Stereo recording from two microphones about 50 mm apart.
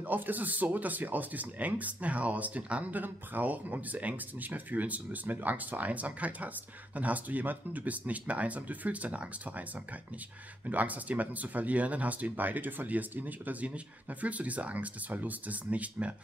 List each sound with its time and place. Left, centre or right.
0.0 s speech: right
10.7 s speech: right